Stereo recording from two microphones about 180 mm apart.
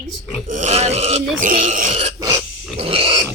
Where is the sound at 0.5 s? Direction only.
40° right (ahead or behind).